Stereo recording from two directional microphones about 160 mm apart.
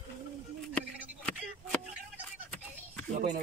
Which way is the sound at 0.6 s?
5° left (ahead or behind).